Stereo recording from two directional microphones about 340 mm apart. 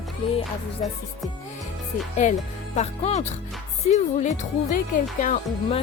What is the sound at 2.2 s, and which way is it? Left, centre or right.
Speech, left.